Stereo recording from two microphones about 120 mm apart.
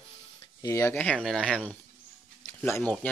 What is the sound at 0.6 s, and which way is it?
Speech, 25° left (ahead or behind).